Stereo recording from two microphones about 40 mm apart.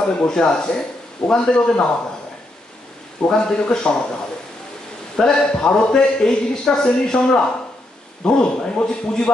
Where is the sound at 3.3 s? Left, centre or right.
Centre.